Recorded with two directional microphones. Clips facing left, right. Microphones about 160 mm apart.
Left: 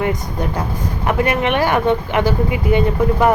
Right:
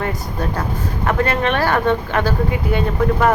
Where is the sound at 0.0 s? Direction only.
15° left (ahead or behind).